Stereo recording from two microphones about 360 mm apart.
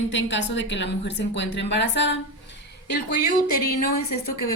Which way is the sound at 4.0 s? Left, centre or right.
Left.